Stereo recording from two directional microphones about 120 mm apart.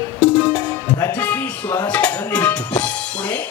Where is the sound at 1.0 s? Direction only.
15° left (ahead or behind).